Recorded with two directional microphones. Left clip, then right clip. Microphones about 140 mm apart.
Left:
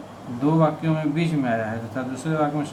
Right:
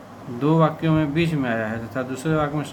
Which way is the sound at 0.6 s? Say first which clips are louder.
Right 2 dB; 90° right.